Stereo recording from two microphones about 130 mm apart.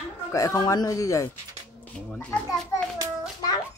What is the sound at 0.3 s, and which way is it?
Speech, 25° left (ahead or behind).